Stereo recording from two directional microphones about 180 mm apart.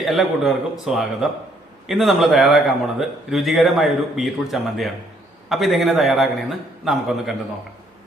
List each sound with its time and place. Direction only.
0.0 s a man's voice: centre (ahead or behind)